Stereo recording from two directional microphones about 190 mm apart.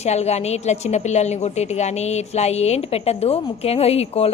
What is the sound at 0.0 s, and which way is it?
A woman's voice, 35° left (ahead or behind).